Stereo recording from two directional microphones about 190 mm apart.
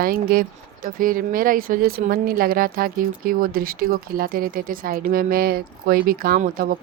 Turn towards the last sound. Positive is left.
turn(degrees=-50)  # may be behind; listen again after turning